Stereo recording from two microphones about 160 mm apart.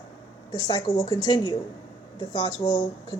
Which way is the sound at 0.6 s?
25° left (ahead or behind).